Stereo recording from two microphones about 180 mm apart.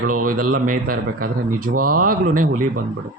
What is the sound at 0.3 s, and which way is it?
Speech, 50° right (ahead or behind).